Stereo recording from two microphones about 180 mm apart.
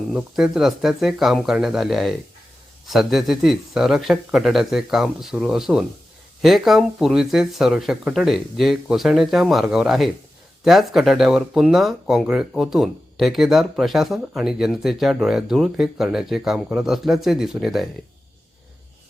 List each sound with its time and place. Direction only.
0.1 s speech: 5° right (ahead or behind)